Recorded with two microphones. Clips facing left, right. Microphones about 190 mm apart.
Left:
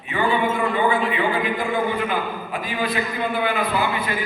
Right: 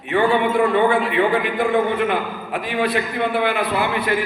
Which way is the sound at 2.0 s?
65° right (ahead or behind).